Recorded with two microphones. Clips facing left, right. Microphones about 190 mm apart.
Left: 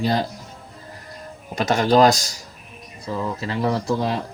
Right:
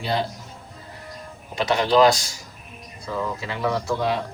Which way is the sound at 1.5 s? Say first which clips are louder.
Left 2 dB; 45° left (ahead or behind).